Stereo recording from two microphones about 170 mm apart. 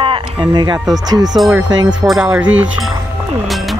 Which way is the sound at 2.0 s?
5° right (ahead or behind).